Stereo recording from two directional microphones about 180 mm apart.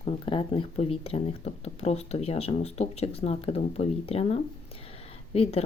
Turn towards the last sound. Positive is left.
turn(degrees=35)  # may be behind; listen again after turning